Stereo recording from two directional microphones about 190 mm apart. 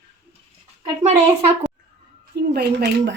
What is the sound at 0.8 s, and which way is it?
Speech, 35° right (ahead or behind).